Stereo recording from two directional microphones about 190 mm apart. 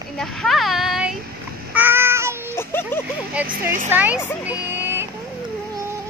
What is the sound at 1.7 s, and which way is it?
Child singing, 10° right (ahead or behind).